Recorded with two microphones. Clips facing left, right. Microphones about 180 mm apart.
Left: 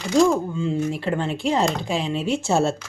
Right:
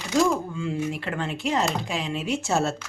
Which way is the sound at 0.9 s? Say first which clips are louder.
Left 5 dB; 30° left (ahead or behind).